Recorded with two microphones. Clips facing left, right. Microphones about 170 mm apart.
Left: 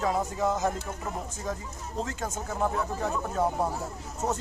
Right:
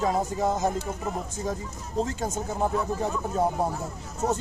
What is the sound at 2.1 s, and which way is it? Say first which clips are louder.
Speech: right 3 dB; 25° right (ahead or behind).